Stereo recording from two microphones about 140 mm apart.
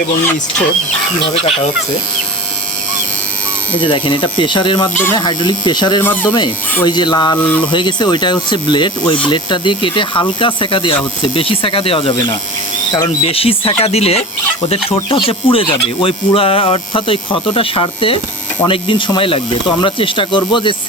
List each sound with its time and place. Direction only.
1.2 s speech: 45° left (ahead or behind)
3.8 s speech: 35° left (ahead or behind)
6.0 s speech: 15° left (ahead or behind)
6.8 s speech: 30° left (ahead or behind)
13.2 s speech: 45° left (ahead or behind)